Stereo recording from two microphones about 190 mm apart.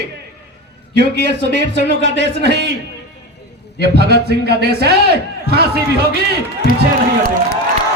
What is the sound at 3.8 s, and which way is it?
A man's voice, 60° right (ahead or behind).